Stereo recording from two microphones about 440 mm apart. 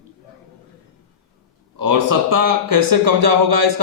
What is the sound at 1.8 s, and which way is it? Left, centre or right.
A man's voice, right.